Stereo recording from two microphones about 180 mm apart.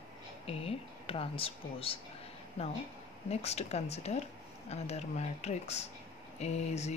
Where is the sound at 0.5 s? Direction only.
30° left (ahead or behind).